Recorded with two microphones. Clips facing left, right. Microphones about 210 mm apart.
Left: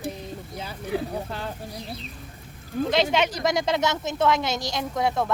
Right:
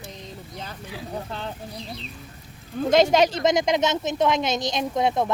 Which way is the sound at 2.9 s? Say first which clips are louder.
Right 6 dB; 45° right (ahead or behind).